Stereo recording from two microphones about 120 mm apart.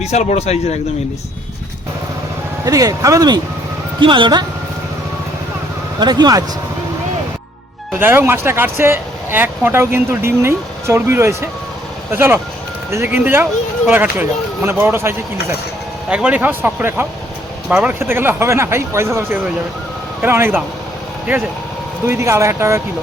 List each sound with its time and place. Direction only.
0.0 s speech: 70° left (ahead or behind)
2.6 s speech: 30° right (ahead or behind)
4.0 s speech: 45° right (ahead or behind)
6.0 s speech: 35° right (ahead or behind)
7.9 s speech: 20° right (ahead or behind)
16.0 s speech: 10° right (ahead or behind)
22.0 s speech: 25° right (ahead or behind)